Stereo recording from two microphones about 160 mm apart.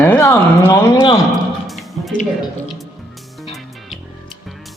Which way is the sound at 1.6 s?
Centre (ahead or behind).